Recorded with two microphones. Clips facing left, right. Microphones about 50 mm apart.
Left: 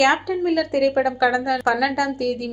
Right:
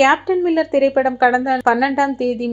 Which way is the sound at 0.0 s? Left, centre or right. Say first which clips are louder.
Right 4 dB; right.